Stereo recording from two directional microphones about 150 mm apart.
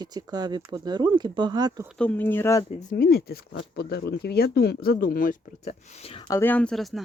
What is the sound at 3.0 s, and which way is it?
Speech, 90° left.